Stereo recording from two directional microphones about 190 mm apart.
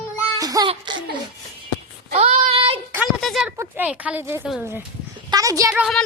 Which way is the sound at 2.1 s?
30° right (ahead or behind).